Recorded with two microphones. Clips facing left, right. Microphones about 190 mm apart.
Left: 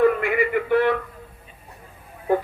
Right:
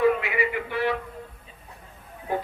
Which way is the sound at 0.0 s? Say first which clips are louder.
Left 3 dB; 50° left (ahead or behind).